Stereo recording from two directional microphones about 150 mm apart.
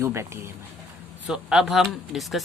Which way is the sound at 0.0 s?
15° right (ahead or behind).